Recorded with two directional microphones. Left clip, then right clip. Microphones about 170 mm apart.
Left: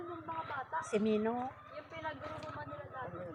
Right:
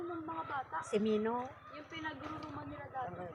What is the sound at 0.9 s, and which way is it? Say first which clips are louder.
Speech: even; 10° right (ahead or behind).